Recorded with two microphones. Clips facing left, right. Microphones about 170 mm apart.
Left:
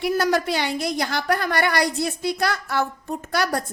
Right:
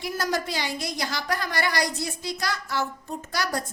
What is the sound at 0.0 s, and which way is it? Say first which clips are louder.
A woman's voice: left 7 dB; 65° left (ahead or behind).